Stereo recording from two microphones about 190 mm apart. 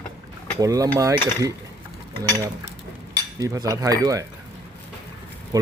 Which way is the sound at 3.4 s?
20° right (ahead or behind).